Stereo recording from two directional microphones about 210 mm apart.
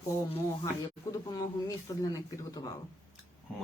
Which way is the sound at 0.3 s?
25° left (ahead or behind).